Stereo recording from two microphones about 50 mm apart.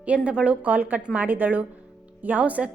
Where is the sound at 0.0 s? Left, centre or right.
Right.